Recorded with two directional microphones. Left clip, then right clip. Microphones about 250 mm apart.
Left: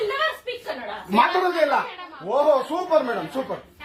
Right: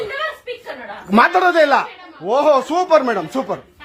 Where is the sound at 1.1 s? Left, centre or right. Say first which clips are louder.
Right 7 dB; right.